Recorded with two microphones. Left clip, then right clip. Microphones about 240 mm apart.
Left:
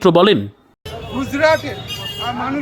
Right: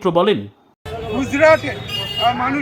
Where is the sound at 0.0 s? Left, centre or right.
Left.